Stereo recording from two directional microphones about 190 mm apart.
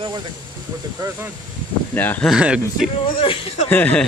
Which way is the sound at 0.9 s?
15° right (ahead or behind).